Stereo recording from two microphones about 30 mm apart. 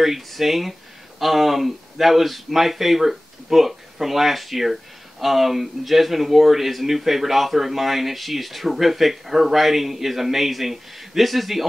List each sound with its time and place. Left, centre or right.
0.3 s speech: centre